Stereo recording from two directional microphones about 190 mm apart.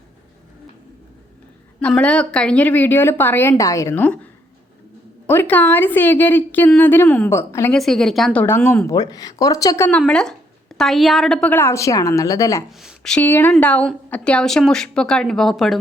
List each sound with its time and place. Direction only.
1.8 s a woman's voice: 5° left (ahead or behind)
5.2 s a woman's voice: 10° left (ahead or behind)
7.7 s a woman's voice: centre (ahead or behind)
9.0 s a woman's voice: 20° left (ahead or behind)
12.8 s a woman's voice: centre (ahead or behind)